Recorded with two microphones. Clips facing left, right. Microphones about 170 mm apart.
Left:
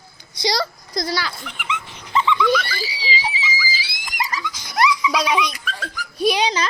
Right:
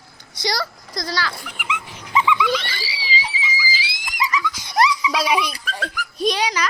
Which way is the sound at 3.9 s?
50° left (ahead or behind).